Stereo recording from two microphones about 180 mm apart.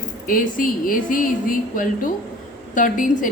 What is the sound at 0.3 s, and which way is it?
A woman's voice, 50° left (ahead or behind).